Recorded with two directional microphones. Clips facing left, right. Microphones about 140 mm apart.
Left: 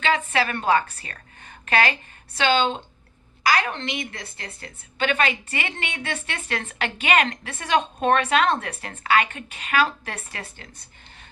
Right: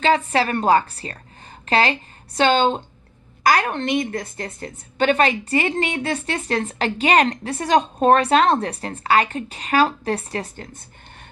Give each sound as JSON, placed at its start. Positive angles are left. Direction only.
{"t": 0.0, "sound": "a woman's voice", "side_deg": -35}